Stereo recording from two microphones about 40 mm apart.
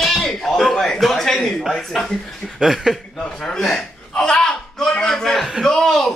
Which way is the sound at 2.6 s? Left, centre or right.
Centre.